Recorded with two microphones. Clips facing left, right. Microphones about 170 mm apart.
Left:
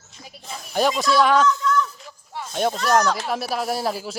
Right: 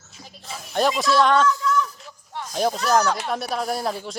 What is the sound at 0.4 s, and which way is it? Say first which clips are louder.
Speech: even; centre (ahead or behind).